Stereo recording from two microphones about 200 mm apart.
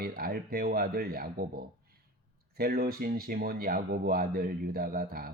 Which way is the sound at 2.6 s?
50° right (ahead or behind).